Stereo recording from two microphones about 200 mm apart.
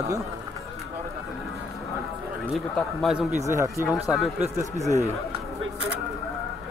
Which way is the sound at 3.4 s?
15° right (ahead or behind).